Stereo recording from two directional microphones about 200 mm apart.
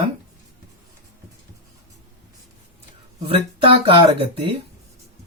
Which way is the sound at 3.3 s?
25° right (ahead or behind).